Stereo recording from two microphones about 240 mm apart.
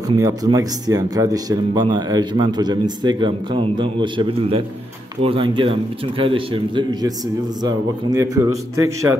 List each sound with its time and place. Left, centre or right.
0.2 s a man's voice: centre